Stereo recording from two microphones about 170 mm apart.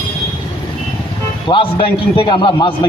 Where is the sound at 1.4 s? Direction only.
30° left (ahead or behind).